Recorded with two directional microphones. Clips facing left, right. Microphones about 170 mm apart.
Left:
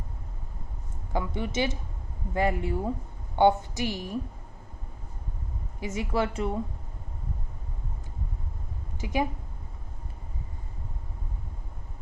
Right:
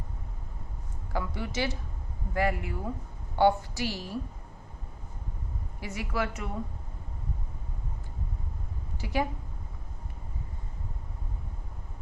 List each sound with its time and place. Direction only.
1.1 s a woman's voice: 20° left (ahead or behind)
5.8 s a woman's voice: 20° left (ahead or behind)
9.0 s speech: 20° left (ahead or behind)